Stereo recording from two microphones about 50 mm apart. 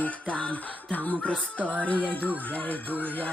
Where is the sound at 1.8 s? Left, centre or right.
Left.